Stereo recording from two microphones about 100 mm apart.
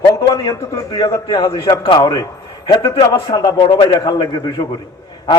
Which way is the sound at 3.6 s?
55° left (ahead or behind).